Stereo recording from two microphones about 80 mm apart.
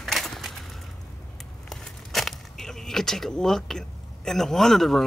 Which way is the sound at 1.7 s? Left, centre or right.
Centre.